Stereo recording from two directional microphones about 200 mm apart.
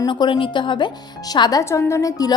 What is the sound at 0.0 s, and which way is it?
Speech, 20° left (ahead or behind).